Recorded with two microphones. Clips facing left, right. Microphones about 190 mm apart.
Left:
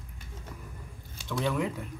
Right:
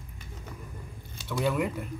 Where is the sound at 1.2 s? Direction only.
5° right (ahead or behind).